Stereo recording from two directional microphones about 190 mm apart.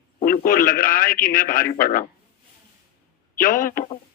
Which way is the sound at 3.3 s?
45° left (ahead or behind).